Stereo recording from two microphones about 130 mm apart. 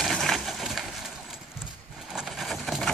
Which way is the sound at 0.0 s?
Centre (ahead or behind).